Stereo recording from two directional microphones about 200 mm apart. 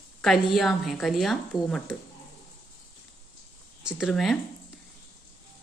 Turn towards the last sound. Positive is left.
turn(degrees=0)  # may be behind; listen again after turning